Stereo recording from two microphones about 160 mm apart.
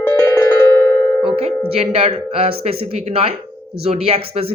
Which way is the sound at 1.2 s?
35° right (ahead or behind).